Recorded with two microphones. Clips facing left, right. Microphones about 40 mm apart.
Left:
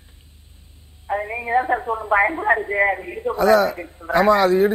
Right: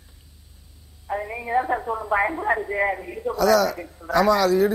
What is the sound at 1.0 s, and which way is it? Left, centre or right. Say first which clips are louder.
Speech: left 4 dB; left.